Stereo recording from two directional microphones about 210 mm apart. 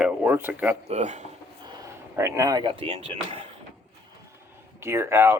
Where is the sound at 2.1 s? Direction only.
15° right (ahead or behind).